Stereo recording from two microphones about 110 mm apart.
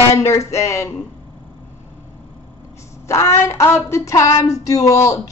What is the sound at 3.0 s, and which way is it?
Speech, 25° left (ahead or behind).